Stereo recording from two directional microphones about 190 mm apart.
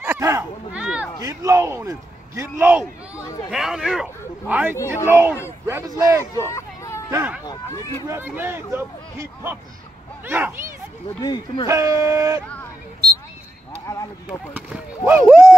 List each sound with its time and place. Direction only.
0.0 s a sound: 15° right (ahead or behind)
1.2 s a man's voice: 15° right (ahead or behind)
6.3 s hubbub: 15° left (ahead or behind)
7.1 s a man's voice: 10° right (ahead or behind)
11.1 s speech: 20° left (ahead or behind)
11.6 s a man's voice: 15° right (ahead or behind)
13.8 s a sound: 20° left (ahead or behind)
14.5 s speech: 10° right (ahead or behind)